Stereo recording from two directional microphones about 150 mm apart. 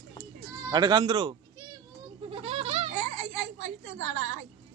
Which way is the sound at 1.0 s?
40° right (ahead or behind).